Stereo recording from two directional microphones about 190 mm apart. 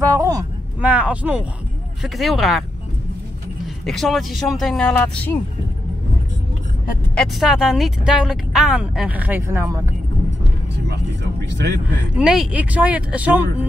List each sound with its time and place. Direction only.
0.0 s a sound: 15° right (ahead or behind)
0.7 s speech: 5° right (ahead or behind)
3.6 s speech: centre (ahead or behind)
7.2 s speech: centre (ahead or behind)
10.9 s vehicle: 60° right (ahead or behind)
12.2 s speech: 5° right (ahead or behind)